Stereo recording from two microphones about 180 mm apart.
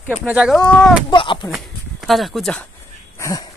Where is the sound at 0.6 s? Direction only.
5° left (ahead or behind).